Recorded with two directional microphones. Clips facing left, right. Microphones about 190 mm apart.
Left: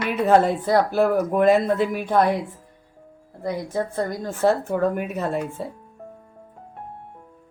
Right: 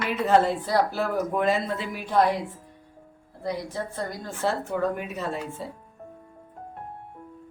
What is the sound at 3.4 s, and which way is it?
Speech, 50° left (ahead or behind).